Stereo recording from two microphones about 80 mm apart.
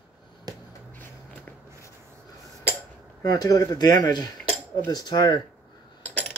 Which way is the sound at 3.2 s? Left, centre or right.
Left.